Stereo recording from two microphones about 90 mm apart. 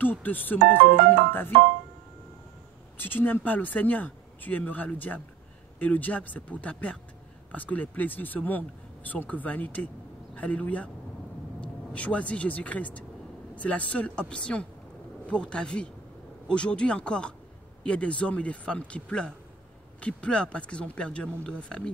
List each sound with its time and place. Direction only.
0.0 s speech: 20° left (ahead or behind)
3.0 s speech: 20° left (ahead or behind)